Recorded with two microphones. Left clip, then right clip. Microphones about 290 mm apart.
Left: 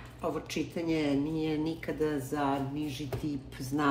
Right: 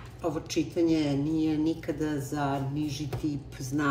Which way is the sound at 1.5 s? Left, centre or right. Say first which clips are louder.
Right 4 dB; left.